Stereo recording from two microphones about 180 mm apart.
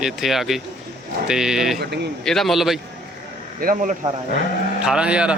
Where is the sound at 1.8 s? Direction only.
70° right (ahead or behind).